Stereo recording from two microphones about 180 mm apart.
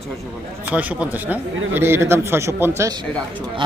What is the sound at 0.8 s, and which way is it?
Speech, 10° right (ahead or behind).